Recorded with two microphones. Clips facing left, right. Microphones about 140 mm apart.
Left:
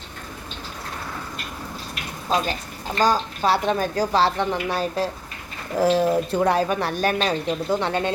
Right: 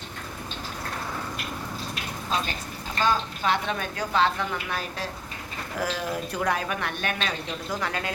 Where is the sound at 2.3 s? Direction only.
35° left (ahead or behind).